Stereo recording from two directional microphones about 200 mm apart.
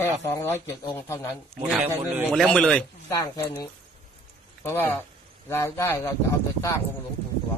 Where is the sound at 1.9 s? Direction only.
5° right (ahead or behind).